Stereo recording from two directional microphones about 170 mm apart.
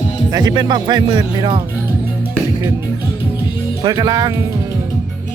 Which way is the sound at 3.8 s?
25° right (ahead or behind).